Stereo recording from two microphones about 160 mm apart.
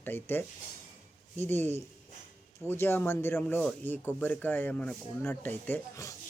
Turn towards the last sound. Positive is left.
turn(degrees=15)  # may be behind; listen again after turning